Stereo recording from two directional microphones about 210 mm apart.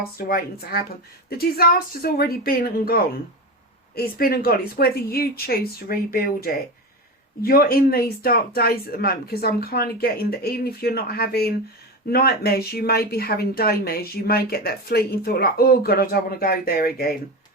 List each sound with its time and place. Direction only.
0.0 s speech: 45° left (ahead or behind)